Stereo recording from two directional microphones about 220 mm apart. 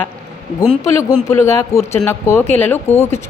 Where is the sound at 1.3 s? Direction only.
10° left (ahead or behind).